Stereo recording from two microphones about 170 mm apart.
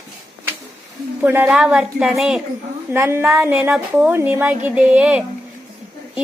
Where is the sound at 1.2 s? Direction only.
10° right (ahead or behind).